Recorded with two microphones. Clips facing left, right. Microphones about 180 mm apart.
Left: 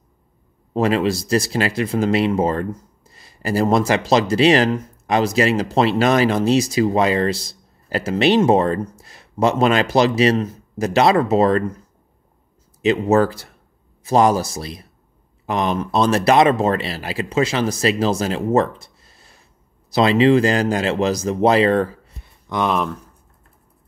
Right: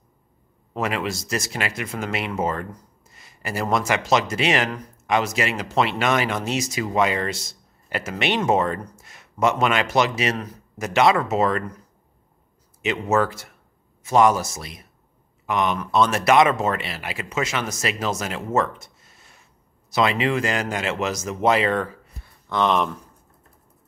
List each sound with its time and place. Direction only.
0.7 s speech: 30° left (ahead or behind)
12.8 s speech: 35° left (ahead or behind)
22.2 s a sound: 10° left (ahead or behind)